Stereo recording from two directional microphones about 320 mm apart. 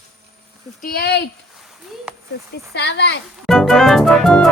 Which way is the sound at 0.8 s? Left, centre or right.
Left.